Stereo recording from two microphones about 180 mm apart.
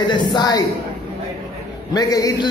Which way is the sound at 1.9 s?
20° left (ahead or behind).